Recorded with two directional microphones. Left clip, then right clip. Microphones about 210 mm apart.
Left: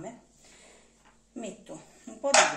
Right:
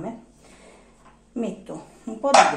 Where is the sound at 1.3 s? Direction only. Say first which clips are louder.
Right 10 dB; 10° right (ahead or behind).